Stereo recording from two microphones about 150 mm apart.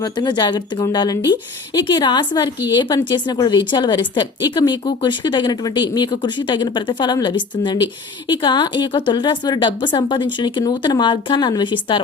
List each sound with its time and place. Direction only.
0.0 s a woman's voice: 30° left (ahead or behind)